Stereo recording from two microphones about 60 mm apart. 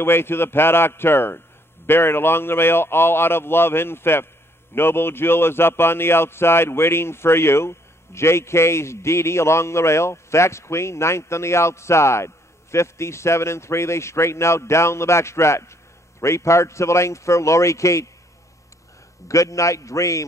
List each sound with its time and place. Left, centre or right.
0.0 s a man's voice: left
19.2 s a man's voice: left